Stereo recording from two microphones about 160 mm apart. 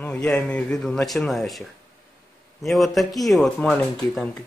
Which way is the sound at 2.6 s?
Centre (ahead or behind).